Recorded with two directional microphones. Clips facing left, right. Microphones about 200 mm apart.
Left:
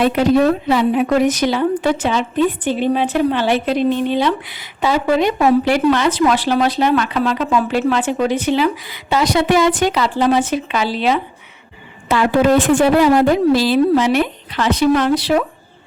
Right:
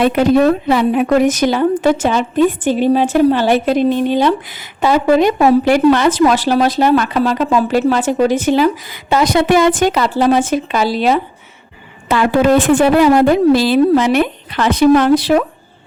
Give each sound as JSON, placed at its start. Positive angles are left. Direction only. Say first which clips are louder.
{"t": 0.0, "sound": "speech", "louder": "right 2 dB", "side_deg": -55}
{"t": 12.0, "sound": "a woman's voice", "louder": "right 2 dB", "side_deg": -55}